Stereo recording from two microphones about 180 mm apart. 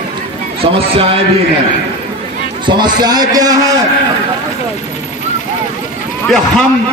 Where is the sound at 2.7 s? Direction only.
25° right (ahead or behind).